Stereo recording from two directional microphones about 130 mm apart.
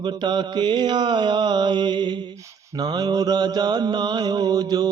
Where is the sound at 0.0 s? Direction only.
35° right (ahead or behind).